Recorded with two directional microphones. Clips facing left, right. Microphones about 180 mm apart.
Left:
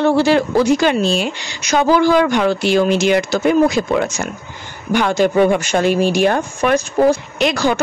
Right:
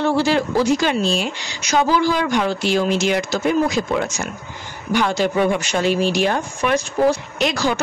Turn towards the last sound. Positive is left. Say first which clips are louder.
# left 4 dB
turn(degrees=60)  # may be behind; listen again after turning